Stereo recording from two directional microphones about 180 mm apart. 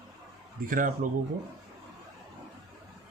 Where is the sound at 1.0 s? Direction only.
50° right (ahead or behind).